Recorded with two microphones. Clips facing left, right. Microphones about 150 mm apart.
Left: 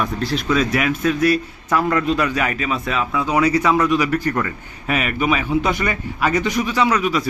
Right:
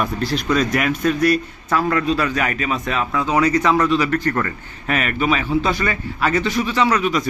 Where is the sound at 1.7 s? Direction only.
20° left (ahead or behind).